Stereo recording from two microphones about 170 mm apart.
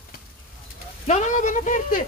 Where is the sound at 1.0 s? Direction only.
45° left (ahead or behind).